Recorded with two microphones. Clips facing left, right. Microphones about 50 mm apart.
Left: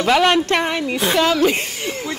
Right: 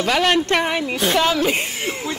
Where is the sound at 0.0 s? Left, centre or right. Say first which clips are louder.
Left 3 dB; centre.